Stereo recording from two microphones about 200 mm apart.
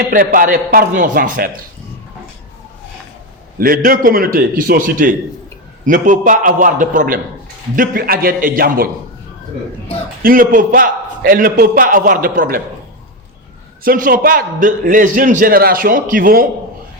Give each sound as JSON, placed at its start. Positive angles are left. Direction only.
{"t": 0.1, "sound": "a man's voice", "side_deg": -45}
{"t": 3.6, "sound": "a man's voice", "side_deg": -45}
{"t": 10.2, "sound": "a man's voice", "side_deg": -45}
{"t": 13.8, "sound": "a man's voice", "side_deg": -45}